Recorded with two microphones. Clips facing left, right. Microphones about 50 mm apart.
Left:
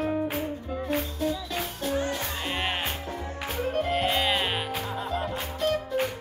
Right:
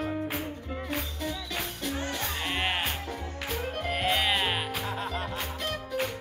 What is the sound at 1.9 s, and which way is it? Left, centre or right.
Music, left.